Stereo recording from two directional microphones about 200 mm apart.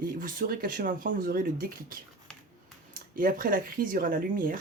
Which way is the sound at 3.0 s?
45° right (ahead or behind).